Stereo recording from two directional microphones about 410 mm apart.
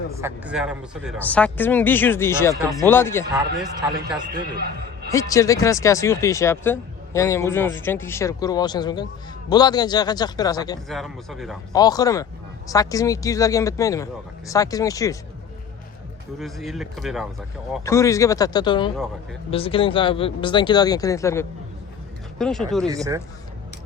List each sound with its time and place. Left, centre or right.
0.2 s speech: centre
4.3 s a man's voice: right
5.1 s speech: centre
16.4 s speech: centre